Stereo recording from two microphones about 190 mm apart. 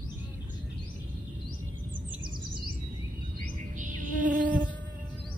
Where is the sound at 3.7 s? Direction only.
45° right (ahead or behind).